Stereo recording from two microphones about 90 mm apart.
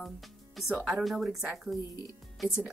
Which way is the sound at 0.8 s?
Centre (ahead or behind).